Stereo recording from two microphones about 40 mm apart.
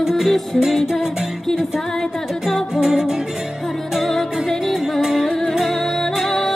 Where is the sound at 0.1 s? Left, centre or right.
Centre.